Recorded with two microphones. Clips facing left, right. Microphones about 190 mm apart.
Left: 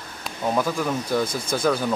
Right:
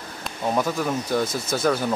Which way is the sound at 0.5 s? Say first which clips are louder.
Even; 5° right (ahead or behind).